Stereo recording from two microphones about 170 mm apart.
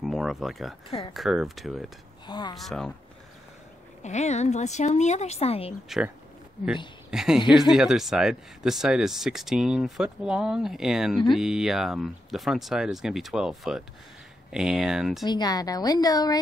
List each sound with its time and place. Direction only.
0.0 s speech: centre (ahead or behind)
0.8 s speech: 30° left (ahead or behind)
1.1 s speech: centre (ahead or behind)
2.2 s a woman's voice: 25° left (ahead or behind)
2.5 s speech: centre (ahead or behind)
4.0 s speech: 40° left (ahead or behind)
5.9 s speech: 5° right (ahead or behind)
15.2 s a woman's voice: 25° left (ahead or behind)